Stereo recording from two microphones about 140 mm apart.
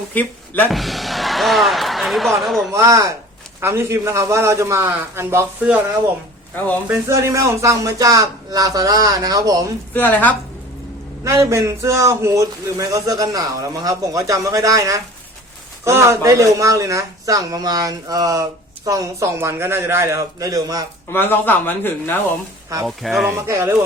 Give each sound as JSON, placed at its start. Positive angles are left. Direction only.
{"t": 0.1, "sound": "speech", "side_deg": 10}
{"t": 0.7, "sound": "speech", "side_deg": 0}
{"t": 2.7, "sound": "a man's voice", "side_deg": -20}
{"t": 6.8, "sound": "a man's voice", "side_deg": -20}
{"t": 9.9, "sound": "a man's voice", "side_deg": 15}
{"t": 11.2, "sound": "a man's voice", "side_deg": -20}
{"t": 21.1, "sound": "a man's voice", "side_deg": 15}
{"t": 22.7, "sound": "a man's voice", "side_deg": -20}
{"t": 23.0, "sound": "speech", "side_deg": 0}
{"t": 23.5, "sound": "a man's voice", "side_deg": -20}